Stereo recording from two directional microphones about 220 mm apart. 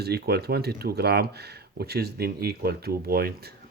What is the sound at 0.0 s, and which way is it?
Speech, 45° right (ahead or behind).